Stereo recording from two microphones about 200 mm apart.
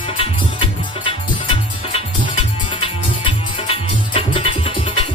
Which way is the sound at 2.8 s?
25° left (ahead or behind).